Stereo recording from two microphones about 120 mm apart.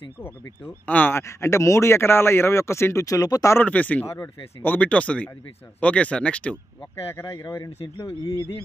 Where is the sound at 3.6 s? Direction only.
15° left (ahead or behind).